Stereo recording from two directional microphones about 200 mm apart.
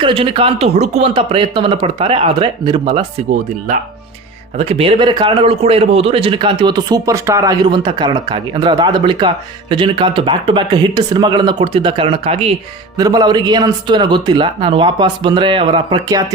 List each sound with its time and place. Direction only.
0.0 s a man's voice: 25° right (ahead or behind)
4.5 s a man's voice: 30° right (ahead or behind)
13.0 s a man's voice: 20° right (ahead or behind)